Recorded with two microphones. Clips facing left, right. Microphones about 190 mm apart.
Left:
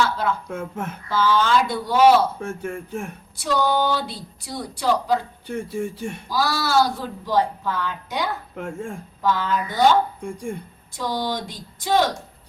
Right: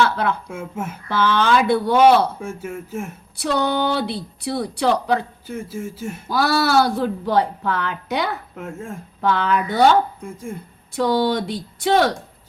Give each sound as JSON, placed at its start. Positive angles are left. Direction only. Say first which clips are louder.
{"t": 0.0, "sound": "speech", "louder": "right 3 dB", "side_deg": -65}
{"t": 0.4, "sound": "speech", "louder": "even", "side_deg": -5}
{"t": 1.0, "sound": "speech", "louder": "right 1 dB", "side_deg": -65}
{"t": 2.4, "sound": "speech", "louder": "even", "side_deg": -5}
{"t": 3.3, "sound": "speech", "louder": "right 1 dB", "side_deg": -65}
{"t": 5.5, "sound": "speech", "louder": "left 4 dB", "side_deg": -5}
{"t": 6.2, "sound": "speech", "louder": "right 5 dB", "side_deg": -60}
{"t": 8.5, "sound": "speech", "louder": "left 1 dB", "side_deg": 0}
{"t": 9.2, "sound": "speech", "louder": "right 3 dB", "side_deg": -65}
{"t": 10.2, "sound": "speech", "louder": "left 2 dB", "side_deg": -5}
{"t": 10.9, "sound": "speech", "louder": "right 7 dB", "side_deg": -65}